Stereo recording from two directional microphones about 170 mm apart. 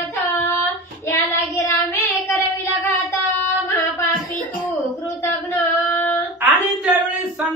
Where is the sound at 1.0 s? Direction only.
15° left (ahead or behind).